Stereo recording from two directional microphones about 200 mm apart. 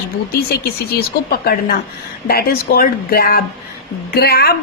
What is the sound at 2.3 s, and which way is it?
Speech, 50° left (ahead or behind).